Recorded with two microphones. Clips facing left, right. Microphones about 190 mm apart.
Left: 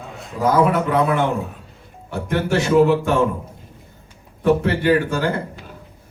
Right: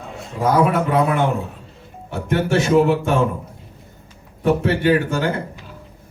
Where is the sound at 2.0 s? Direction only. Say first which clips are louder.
Right 1 dB; 25° right (ahead or behind).